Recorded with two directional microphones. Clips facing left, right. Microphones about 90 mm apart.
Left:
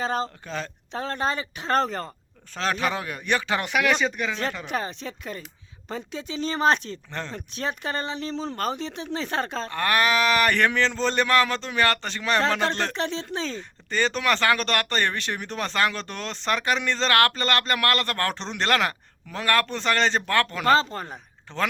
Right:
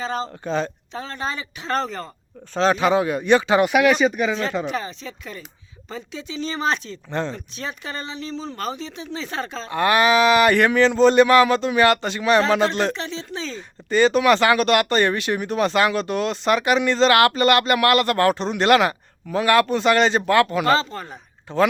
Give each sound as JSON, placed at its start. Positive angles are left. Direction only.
{"t": 0.0, "sound": "speech", "side_deg": 45}
{"t": 0.4, "sound": "speech", "side_deg": -25}
{"t": 0.9, "sound": "speech", "side_deg": 55}
{"t": 2.6, "sound": "speech", "side_deg": -20}
{"t": 4.7, "sound": "speech", "side_deg": 55}
{"t": 7.1, "sound": "speech", "side_deg": -20}
{"t": 7.3, "sound": "speech", "side_deg": 55}
{"t": 9.6, "sound": "speech", "side_deg": -15}
{"t": 12.9, "sound": "speech", "side_deg": 55}
{"t": 13.6, "sound": "speech", "side_deg": -10}
{"t": 20.7, "sound": "speech", "side_deg": 40}
{"t": 21.5, "sound": "speech", "side_deg": -10}